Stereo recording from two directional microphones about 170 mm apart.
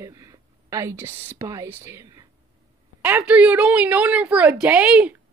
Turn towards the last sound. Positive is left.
turn(degrees=-5)  # may be behind; listen again after turning